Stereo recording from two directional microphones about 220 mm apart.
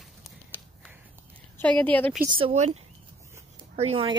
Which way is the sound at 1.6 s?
5° left (ahead or behind).